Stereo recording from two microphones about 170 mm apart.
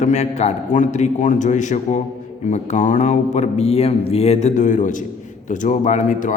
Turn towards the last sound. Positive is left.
turn(degrees=45)  # may be behind; listen again after turning